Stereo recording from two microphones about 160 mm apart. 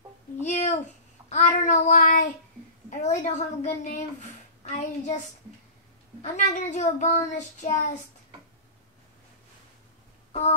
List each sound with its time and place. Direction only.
0.4 s a sound: 45° left (ahead or behind)
1.3 s child singing: 50° left (ahead or behind)
2.9 s a woman's voice: 50° left (ahead or behind)
6.2 s a woman's voice: 50° left (ahead or behind)